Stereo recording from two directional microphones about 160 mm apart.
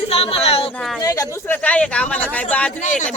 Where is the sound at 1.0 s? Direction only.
20° left (ahead or behind).